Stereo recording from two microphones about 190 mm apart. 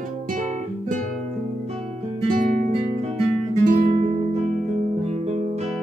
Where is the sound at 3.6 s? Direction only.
45° right (ahead or behind).